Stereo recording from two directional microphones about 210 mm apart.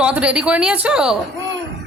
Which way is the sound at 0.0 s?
5° right (ahead or behind).